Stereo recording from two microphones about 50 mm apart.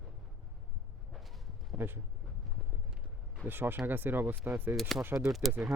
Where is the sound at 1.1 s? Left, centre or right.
Centre.